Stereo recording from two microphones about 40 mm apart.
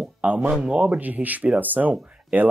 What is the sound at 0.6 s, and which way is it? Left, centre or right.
Speech, centre.